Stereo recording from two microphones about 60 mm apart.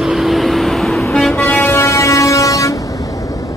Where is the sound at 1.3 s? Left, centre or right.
Left.